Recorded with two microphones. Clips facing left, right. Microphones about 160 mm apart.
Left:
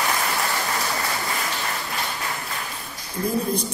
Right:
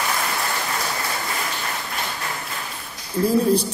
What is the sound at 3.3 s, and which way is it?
Speech, 30° right (ahead or behind).